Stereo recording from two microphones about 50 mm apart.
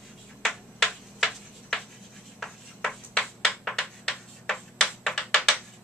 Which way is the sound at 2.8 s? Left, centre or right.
Centre.